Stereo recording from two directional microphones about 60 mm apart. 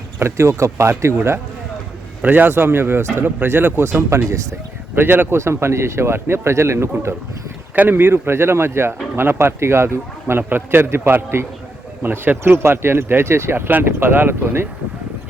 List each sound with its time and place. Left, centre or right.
0.2 s speech: right
2.2 s speech: right
4.1 s speech: right
4.9 s speech: right
5.4 s speech: right
7.8 s speech: right